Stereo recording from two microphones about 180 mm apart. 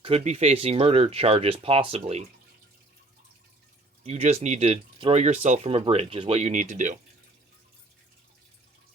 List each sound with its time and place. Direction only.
0.0 s speech: 35° right (ahead or behind)
4.0 s speech: 35° right (ahead or behind)